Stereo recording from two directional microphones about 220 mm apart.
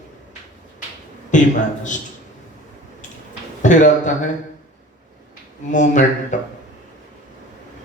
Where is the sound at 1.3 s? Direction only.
35° left (ahead or behind).